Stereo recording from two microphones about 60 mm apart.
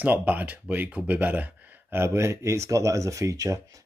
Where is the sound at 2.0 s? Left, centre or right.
Right.